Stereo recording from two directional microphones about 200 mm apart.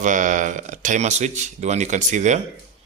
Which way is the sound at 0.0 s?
40° right (ahead or behind).